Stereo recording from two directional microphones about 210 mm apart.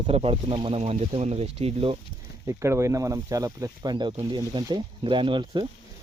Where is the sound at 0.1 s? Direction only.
25° right (ahead or behind).